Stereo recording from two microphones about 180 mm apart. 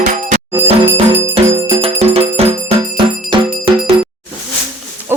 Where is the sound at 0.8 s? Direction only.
10° right (ahead or behind).